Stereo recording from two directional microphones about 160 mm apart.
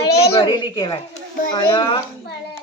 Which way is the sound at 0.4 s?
30° left (ahead or behind).